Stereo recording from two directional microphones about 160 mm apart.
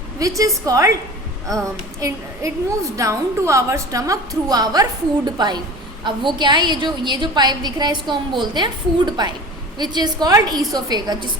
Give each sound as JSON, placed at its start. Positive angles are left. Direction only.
{"t": 0.2, "sound": "a woman's voice", "side_deg": -20}